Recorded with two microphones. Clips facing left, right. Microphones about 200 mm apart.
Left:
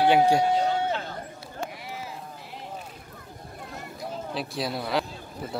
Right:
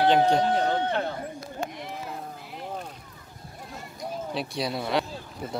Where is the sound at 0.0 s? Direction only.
10° left (ahead or behind).